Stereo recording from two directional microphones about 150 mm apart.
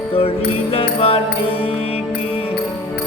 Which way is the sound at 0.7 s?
40° left (ahead or behind).